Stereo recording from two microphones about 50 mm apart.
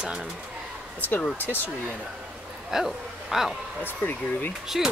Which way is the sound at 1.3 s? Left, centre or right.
Left.